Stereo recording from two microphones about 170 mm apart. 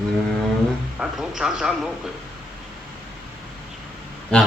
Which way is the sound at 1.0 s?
5° right (ahead or behind).